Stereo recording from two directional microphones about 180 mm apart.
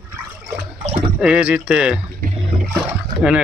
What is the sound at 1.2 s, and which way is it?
Speech, 5° right (ahead or behind).